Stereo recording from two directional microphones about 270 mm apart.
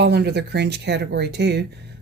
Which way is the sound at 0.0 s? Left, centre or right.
Right.